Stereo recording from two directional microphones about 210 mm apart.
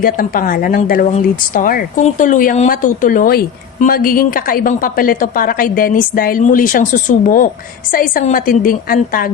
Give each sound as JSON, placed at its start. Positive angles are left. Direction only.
{"t": 0.0, "sound": "speech", "side_deg": 40}